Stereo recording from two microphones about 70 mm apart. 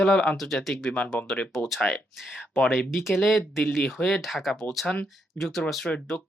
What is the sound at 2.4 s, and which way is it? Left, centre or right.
Speech, left.